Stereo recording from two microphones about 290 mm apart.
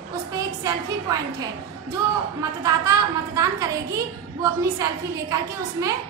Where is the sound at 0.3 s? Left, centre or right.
Centre.